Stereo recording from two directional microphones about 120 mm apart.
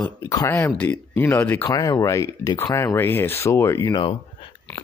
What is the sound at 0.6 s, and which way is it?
Speech, 15° left (ahead or behind).